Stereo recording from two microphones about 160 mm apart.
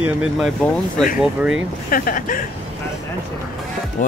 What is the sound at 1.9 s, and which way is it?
Speech, 60° left (ahead or behind).